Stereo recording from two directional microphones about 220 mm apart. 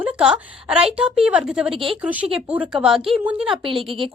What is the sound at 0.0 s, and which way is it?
A woman's voice, 5° right (ahead or behind).